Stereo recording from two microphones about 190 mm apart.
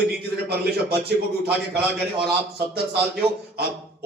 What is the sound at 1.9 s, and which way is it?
A man's voice, 60° right (ahead or behind).